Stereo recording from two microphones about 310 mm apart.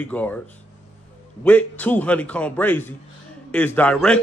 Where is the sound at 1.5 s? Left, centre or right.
Centre.